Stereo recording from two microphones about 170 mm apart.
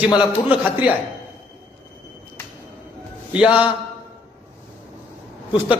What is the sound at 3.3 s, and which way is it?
Speech, 5° right (ahead or behind).